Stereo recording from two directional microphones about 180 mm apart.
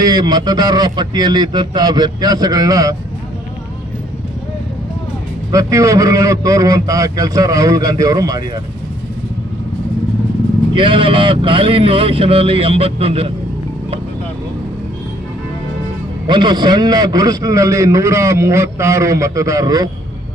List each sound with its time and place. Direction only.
0.0 s a man's voice: 20° right (ahead or behind)
5.5 s a man's voice: 20° right (ahead or behind)
10.8 s speech: 30° right (ahead or behind)
16.2 s a man's voice: 25° right (ahead or behind)